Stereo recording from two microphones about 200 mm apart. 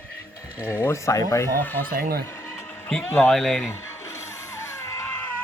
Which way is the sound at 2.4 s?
10° left (ahead or behind).